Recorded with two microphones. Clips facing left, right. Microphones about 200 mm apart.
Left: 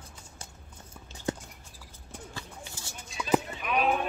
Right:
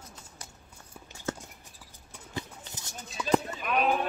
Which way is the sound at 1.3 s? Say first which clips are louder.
Left 2 dB; 15° left (ahead or behind).